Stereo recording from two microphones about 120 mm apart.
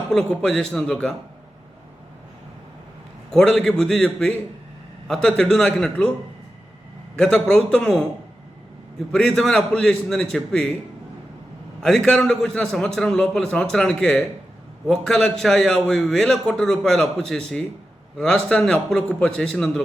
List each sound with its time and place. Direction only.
0.1 s a man's voice: 5° left (ahead or behind)
3.3 s a man's voice: 5° left (ahead or behind)
7.2 s a man's voice: 5° left (ahead or behind)
9.1 s a man's voice: 5° left (ahead or behind)
11.8 s a man's voice: 5° left (ahead or behind)